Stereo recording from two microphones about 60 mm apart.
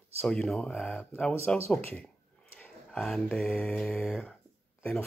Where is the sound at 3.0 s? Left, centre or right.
Centre.